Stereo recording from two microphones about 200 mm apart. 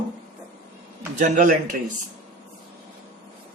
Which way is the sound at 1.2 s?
40° right (ahead or behind).